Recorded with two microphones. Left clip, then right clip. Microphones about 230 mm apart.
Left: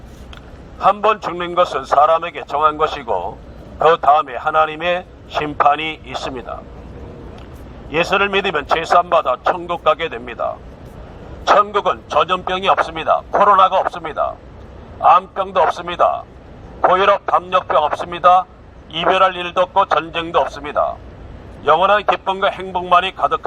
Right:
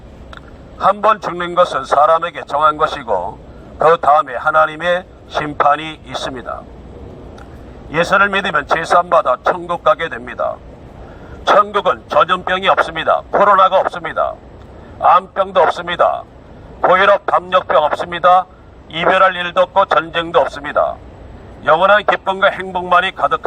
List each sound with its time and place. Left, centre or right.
0.8 s a man's voice: right
7.9 s a man's voice: right